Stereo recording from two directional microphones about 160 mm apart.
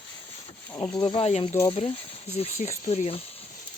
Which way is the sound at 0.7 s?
25° left (ahead or behind).